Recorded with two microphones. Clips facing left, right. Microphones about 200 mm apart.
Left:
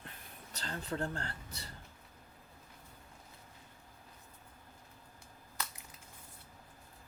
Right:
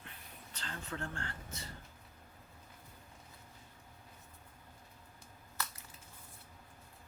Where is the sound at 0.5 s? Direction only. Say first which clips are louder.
Left 5 dB; 35° left (ahead or behind).